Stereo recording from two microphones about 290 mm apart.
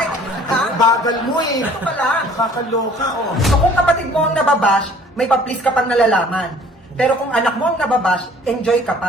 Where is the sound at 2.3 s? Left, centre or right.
Centre.